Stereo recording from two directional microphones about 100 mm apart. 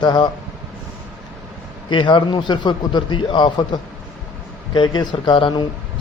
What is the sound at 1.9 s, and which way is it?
A man's voice, 55° left (ahead or behind).